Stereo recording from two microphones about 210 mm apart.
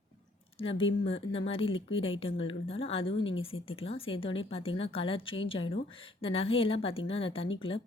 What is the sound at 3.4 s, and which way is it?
Speech, 25° left (ahead or behind).